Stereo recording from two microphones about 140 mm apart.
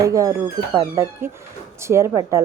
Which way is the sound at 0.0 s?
25° right (ahead or behind).